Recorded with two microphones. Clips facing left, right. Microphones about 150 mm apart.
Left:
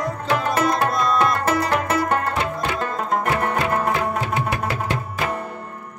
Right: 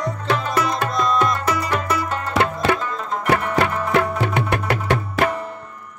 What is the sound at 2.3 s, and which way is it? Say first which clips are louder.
Music: right 5 dB; 70° right (ahead or behind).